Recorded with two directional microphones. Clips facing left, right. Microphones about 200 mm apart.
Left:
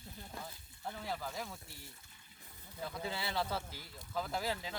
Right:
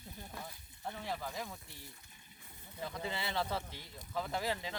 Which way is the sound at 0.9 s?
Centre (ahead or behind).